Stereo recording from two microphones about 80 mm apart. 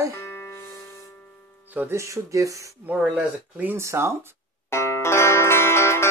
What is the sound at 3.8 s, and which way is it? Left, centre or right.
Speech, right.